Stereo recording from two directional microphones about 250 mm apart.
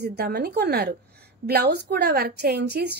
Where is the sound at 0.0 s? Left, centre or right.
Right.